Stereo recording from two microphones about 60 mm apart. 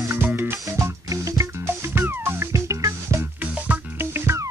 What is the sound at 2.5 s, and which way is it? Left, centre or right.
Music, right.